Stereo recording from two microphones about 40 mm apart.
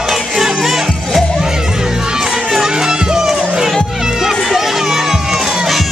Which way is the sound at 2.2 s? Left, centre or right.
Centre.